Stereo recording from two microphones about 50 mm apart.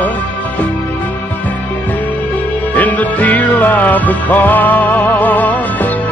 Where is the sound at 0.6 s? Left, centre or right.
Left.